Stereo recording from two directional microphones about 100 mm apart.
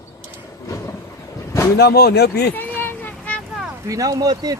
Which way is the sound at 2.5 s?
20° left (ahead or behind).